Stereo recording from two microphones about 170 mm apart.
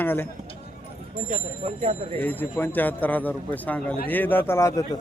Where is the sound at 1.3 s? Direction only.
45° right (ahead or behind).